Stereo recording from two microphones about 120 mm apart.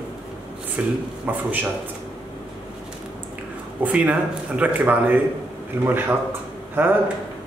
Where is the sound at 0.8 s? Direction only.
10° right (ahead or behind).